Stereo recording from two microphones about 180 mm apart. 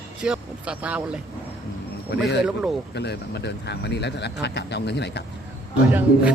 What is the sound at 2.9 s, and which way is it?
Speech, 70° left (ahead or behind).